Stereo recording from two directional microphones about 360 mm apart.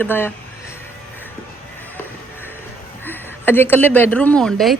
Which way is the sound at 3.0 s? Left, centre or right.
Centre.